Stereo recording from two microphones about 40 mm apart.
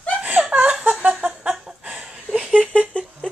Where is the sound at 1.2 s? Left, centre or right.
Right.